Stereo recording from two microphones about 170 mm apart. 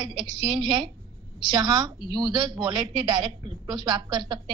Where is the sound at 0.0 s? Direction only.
25° right (ahead or behind).